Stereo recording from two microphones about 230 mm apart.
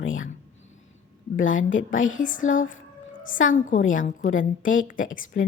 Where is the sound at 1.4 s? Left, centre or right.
Left.